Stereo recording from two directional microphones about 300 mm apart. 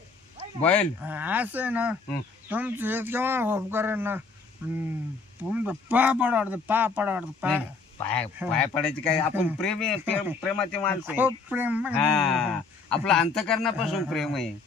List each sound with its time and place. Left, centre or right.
0.6 s a man's voice: centre
5.4 s a man's voice: centre